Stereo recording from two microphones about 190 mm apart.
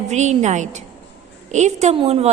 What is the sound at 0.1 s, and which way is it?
A woman's voice, 35° right (ahead or behind).